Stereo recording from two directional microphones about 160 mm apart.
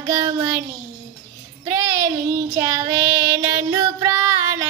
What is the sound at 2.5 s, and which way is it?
Child singing, 20° right (ahead or behind).